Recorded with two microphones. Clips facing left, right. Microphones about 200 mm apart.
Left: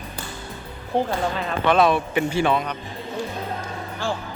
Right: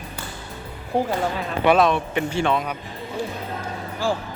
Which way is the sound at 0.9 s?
10° right (ahead or behind).